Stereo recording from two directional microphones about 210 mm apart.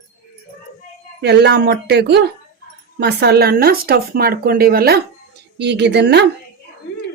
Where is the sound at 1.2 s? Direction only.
50° right (ahead or behind).